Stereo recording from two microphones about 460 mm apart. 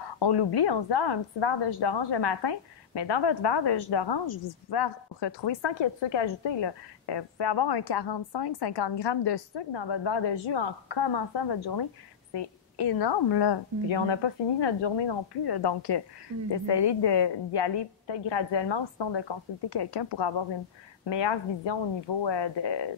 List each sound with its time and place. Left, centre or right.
0.2 s a woman's voice: left